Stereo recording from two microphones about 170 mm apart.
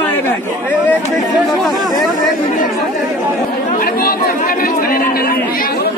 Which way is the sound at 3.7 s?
60° left (ahead or behind).